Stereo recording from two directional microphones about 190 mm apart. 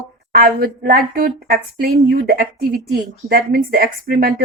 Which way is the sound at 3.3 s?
55° right (ahead or behind).